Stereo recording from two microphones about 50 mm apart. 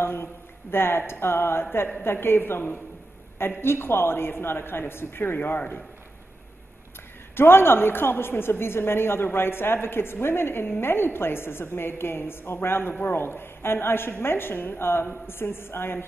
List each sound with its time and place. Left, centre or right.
0.0 s a woman's voice: left
7.3 s a woman's voice: left